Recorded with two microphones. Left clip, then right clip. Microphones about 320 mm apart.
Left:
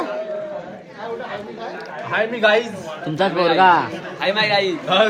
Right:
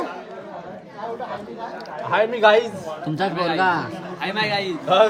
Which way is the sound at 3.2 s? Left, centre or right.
Centre.